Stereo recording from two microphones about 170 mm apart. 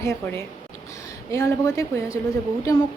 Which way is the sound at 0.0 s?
15° left (ahead or behind).